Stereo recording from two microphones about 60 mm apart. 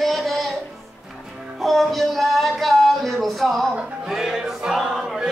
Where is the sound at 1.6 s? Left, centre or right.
Centre.